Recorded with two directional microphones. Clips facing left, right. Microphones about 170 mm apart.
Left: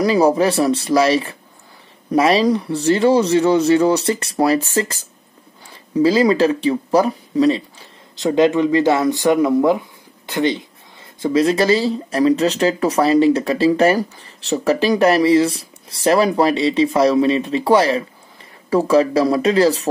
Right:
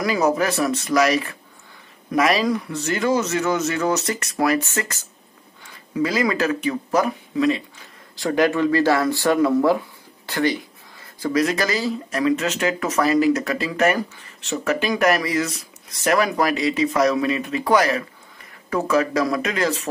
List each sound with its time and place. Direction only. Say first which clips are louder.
0.0 s speech: left 6 dB; 30° left (ahead or behind)
8.2 s speech: left 4 dB; 20° left (ahead or behind)